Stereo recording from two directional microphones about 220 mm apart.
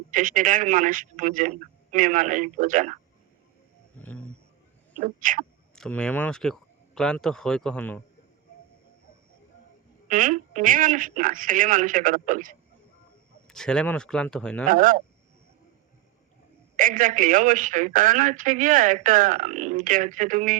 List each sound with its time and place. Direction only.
0.1 s a woman's voice: 40° right (ahead or behind)
3.9 s wild animals: 5° left (ahead or behind)
4.9 s a woman's voice: 35° right (ahead or behind)
5.7 s speech: 5° left (ahead or behind)
10.1 s a woman's voice: 35° right (ahead or behind)
13.5 s speech: 5° left (ahead or behind)
14.7 s a woman's voice: 35° right (ahead or behind)
16.7 s a woman's voice: 40° right (ahead or behind)